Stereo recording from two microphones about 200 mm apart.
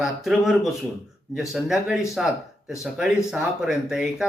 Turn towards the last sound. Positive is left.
turn(degrees=-5)  # may be behind; listen again after turning